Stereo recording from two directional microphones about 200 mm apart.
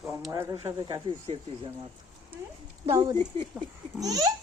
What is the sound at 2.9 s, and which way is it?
Speech, 20° right (ahead or behind).